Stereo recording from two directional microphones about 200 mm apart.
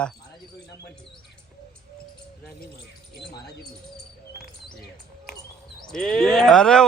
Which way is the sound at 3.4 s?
55° left (ahead or behind).